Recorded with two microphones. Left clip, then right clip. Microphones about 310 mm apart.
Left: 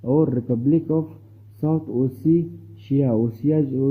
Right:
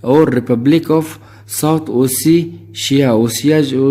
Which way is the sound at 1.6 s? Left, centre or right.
Right.